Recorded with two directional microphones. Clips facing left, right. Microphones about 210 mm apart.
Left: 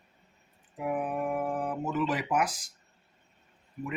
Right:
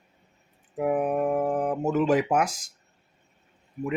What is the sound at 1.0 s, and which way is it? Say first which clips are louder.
Speech: right 7 dB; 45° right (ahead or behind).